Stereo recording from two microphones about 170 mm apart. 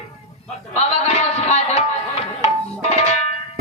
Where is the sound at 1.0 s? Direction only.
35° left (ahead or behind).